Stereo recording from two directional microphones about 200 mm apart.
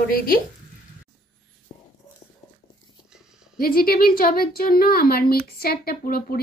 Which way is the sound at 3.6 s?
50° left (ahead or behind).